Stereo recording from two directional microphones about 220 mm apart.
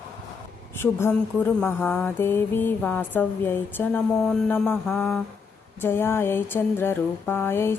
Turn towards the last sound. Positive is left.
turn(degrees=10)  # may be behind; listen again after turning